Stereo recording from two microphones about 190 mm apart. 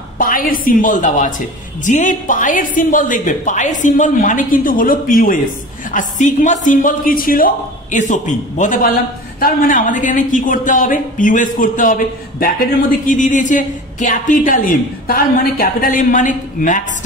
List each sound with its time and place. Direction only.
0.2 s speech: 45° left (ahead or behind)